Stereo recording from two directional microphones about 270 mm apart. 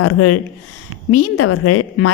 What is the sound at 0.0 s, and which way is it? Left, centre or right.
Speech, left.